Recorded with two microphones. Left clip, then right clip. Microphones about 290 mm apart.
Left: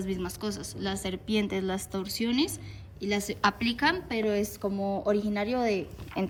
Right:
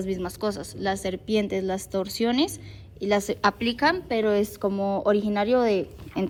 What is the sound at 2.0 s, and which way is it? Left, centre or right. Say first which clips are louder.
Speech: right 4 dB; centre.